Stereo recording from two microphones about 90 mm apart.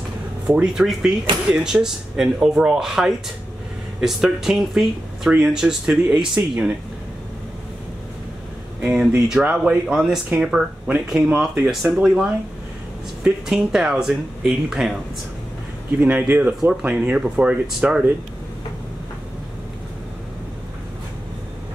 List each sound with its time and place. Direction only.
0.5 s speech: 15° right (ahead or behind)
8.8 s speech: 10° right (ahead or behind)
16.0 s speech: 20° right (ahead or behind)